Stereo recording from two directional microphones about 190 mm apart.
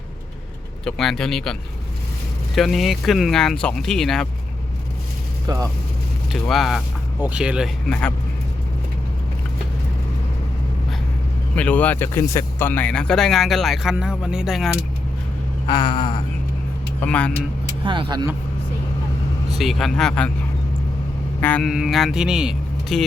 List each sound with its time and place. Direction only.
0.9 s speech: centre (ahead or behind)
2.6 s speech: centre (ahead or behind)
5.5 s speech: 20° right (ahead or behind)
6.3 s speech: centre (ahead or behind)
11.5 s speech: 5° left (ahead or behind)
15.6 s a sound: 20° left (ahead or behind)
17.0 s speech: 5° left (ahead or behind)
17.8 s speech: 25° right (ahead or behind)
19.5 s speech: centre (ahead or behind)
21.4 s speech: 5° left (ahead or behind)